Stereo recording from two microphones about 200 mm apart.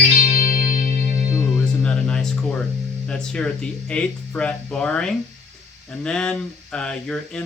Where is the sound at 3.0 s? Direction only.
5° left (ahead or behind).